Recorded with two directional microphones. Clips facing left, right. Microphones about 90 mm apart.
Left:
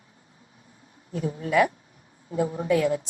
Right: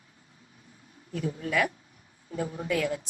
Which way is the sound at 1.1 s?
30° left (ahead or behind).